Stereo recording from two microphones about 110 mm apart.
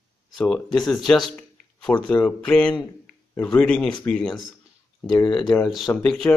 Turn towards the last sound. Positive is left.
turn(degrees=0)  # may be behind; listen again after turning